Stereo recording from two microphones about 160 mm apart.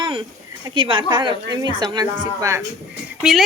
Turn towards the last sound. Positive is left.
turn(degrees=0)  # may be behind; listen again after turning